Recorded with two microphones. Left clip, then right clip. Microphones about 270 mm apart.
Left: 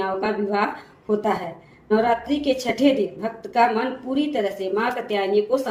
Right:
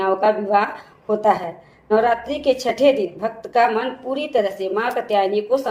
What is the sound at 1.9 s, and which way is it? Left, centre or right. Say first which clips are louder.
A woman's voice: right 3 dB; right.